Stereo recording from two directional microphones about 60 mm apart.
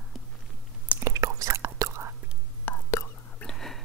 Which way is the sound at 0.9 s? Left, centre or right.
Right.